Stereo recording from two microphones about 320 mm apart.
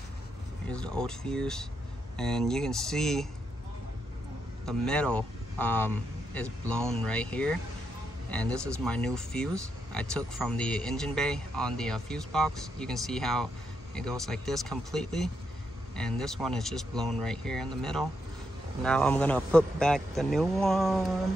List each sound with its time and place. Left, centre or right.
0.7 s speech: centre
4.6 s speech: centre